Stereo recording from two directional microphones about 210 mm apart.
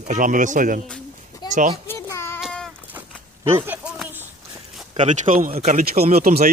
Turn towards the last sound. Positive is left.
turn(degrees=-40)  # may be behind; listen again after turning